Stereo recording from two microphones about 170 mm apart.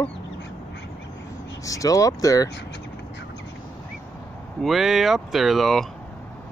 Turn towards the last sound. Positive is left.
turn(degrees=0)  # may be behind; listen again after turning